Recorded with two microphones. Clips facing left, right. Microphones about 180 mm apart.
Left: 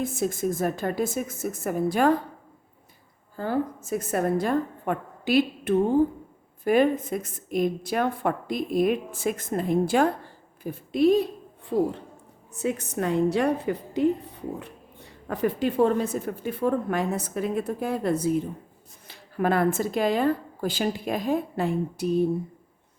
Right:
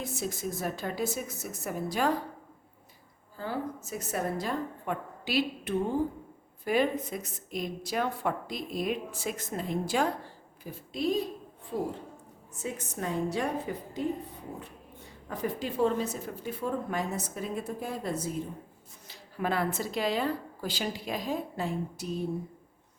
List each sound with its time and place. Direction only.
0.0 s a woman's voice: 50° left (ahead or behind)
3.3 s a woman's voice: 50° left (ahead or behind)
11.7 s a woman's voice: 90° left
12.5 s a woman's voice: 70° left (ahead or behind)
15.3 s a woman's voice: 65° left (ahead or behind)